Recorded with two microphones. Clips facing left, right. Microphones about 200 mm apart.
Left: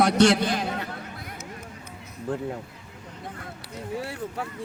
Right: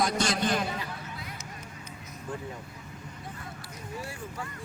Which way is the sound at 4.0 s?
70° left (ahead or behind).